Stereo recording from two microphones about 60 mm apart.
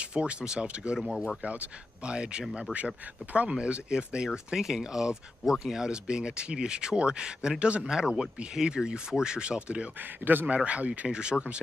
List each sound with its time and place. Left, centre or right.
0.0 s speech: centre
1.1 s speech: centre
1.4 s speech: right